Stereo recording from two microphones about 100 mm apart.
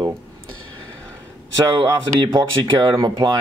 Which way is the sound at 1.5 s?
30° right (ahead or behind).